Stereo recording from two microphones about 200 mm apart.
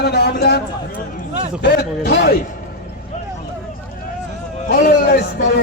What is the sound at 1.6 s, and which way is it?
Speech, 50° left (ahead or behind).